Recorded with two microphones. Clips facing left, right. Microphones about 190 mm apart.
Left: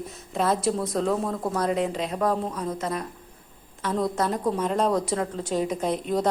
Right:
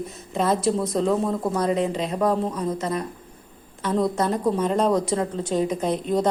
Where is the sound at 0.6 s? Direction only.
25° right (ahead or behind).